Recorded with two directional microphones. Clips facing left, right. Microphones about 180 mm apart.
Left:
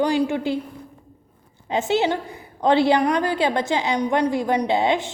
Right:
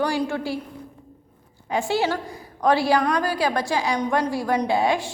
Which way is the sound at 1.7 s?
20° left (ahead or behind).